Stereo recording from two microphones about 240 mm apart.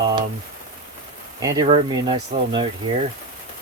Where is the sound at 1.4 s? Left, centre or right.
Centre.